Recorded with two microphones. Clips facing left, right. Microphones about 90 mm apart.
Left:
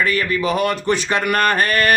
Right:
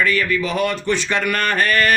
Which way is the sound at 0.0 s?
45° left (ahead or behind).